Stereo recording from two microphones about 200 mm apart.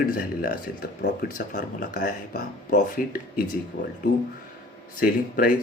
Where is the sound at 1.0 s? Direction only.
60° left (ahead or behind); by 3.4 s 45° left (ahead or behind).